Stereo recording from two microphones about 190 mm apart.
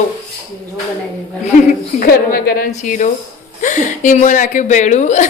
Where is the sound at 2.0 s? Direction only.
50° left (ahead or behind).